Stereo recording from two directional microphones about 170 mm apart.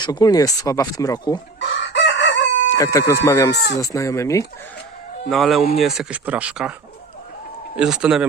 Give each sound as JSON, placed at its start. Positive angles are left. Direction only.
{"t": 0.0, "sound": "speech", "side_deg": 25}
{"t": 1.5, "sound": "chicken", "side_deg": 90}
{"t": 2.7, "sound": "speech", "side_deg": 20}
{"t": 3.5, "sound": "speech", "side_deg": 90}
{"t": 3.8, "sound": "speech", "side_deg": 20}
{"t": 5.3, "sound": "speech", "side_deg": 0}
{"t": 7.8, "sound": "speech", "side_deg": -5}